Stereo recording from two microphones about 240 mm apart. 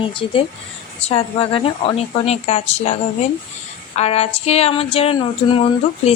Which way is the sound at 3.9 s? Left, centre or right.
Left.